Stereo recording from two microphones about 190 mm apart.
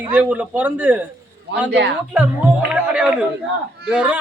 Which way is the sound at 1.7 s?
65° right (ahead or behind).